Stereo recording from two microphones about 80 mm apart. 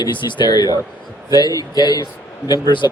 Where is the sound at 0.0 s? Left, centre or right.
Left.